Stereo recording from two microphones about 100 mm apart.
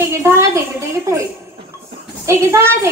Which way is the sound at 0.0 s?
30° right (ahead or behind).